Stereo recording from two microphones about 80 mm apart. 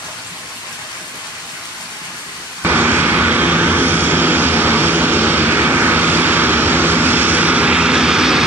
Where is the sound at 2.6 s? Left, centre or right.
Right.